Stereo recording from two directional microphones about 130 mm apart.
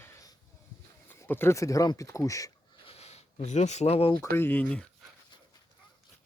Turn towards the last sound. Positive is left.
turn(degrees=10)  # may be behind; listen again after turning